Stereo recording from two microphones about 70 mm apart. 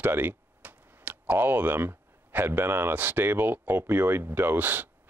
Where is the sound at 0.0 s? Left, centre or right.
Right.